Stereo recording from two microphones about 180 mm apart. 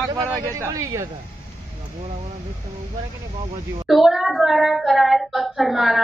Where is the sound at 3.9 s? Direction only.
Centre (ahead or behind).